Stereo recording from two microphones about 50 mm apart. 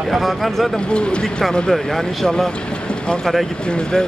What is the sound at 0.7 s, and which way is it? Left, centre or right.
Speech, centre.